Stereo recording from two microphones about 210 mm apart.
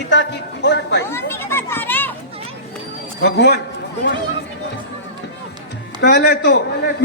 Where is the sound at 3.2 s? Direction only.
55° left (ahead or behind).